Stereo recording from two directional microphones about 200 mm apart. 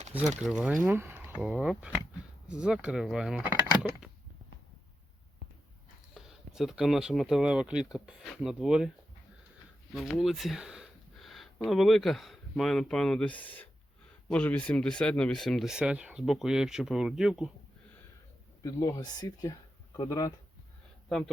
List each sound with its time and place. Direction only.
0.1 s speech: 10° right (ahead or behind)
6.1 s speech: centre (ahead or behind)
9.9 s speech: centre (ahead or behind)
18.6 s speech: 15° left (ahead or behind)